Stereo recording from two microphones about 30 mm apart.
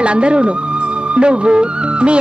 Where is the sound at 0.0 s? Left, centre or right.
Right.